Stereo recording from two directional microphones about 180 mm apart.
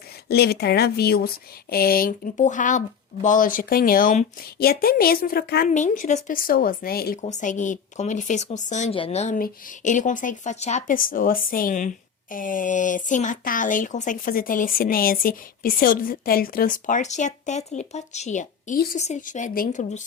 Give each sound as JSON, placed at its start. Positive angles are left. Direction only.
{"t": 0.3, "sound": "speech", "side_deg": 65}
{"t": 5.6, "sound": "speech", "side_deg": 45}
{"t": 7.2, "sound": "speech", "side_deg": 40}